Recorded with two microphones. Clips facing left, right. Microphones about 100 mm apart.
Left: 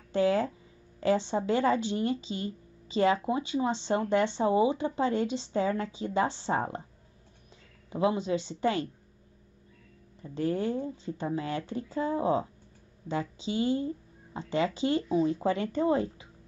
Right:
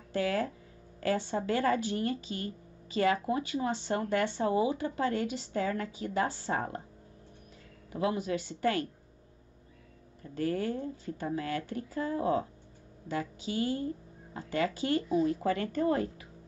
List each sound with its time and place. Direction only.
0.1 s speech: 25° left (ahead or behind)
7.9 s speech: 25° left (ahead or behind)
10.2 s speech: 20° left (ahead or behind)